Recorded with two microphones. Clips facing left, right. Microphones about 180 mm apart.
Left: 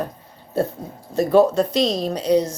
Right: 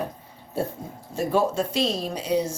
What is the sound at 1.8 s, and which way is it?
Speech, 35° left (ahead or behind).